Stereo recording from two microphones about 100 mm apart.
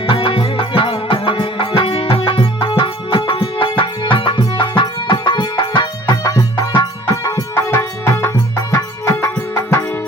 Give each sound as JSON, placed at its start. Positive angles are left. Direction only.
{"t": 0.1, "sound": "music", "side_deg": 60}